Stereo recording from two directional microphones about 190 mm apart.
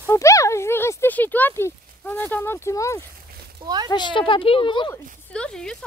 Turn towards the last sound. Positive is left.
turn(degrees=5)  # may be behind; listen again after turning